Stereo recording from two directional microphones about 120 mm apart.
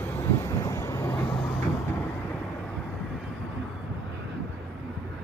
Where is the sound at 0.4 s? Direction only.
25° left (ahead or behind).